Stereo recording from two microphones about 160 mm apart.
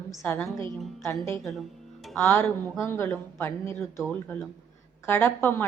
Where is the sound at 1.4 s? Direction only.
Centre (ahead or behind).